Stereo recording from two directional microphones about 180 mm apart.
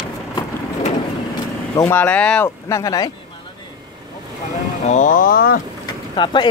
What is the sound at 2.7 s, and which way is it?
Speech, 20° left (ahead or behind).